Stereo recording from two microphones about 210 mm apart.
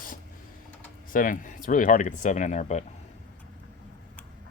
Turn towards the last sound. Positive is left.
turn(degrees=35)  # may be behind; listen again after turning